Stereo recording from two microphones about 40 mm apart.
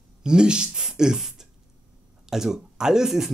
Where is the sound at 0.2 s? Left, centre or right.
Centre.